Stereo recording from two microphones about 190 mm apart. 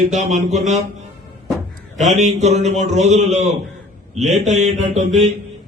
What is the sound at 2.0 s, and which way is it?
A man's voice, 40° right (ahead or behind).